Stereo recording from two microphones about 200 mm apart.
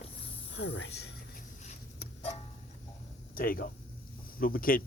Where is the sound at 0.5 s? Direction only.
65° left (ahead or behind).